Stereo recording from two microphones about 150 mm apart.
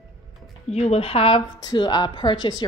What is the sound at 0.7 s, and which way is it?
A woman's voice, 45° left (ahead or behind).